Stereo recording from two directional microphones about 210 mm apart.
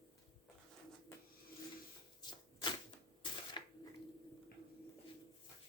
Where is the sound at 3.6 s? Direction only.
20° left (ahead or behind).